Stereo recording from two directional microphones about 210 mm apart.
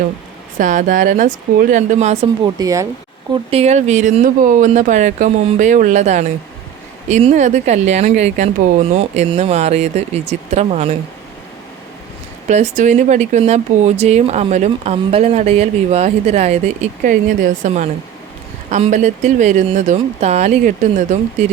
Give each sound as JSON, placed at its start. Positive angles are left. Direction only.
{"t": 0.6, "sound": "speech", "side_deg": -40}
{"t": 2.6, "sound": "speech", "side_deg": -15}
{"t": 3.5, "sound": "speech", "side_deg": -30}
{"t": 12.5, "sound": "speech", "side_deg": -35}